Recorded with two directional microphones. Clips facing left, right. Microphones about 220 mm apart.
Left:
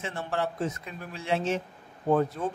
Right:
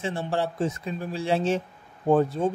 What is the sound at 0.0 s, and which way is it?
Speech, 30° right (ahead or behind).